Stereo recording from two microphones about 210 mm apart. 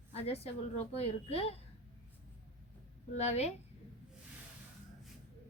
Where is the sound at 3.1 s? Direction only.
30° left (ahead or behind).